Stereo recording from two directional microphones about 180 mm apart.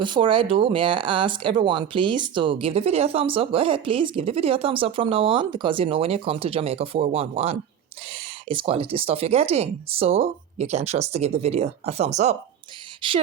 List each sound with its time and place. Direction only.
0.0 s speech: 25° right (ahead or behind)
13.0 s speech: 25° right (ahead or behind)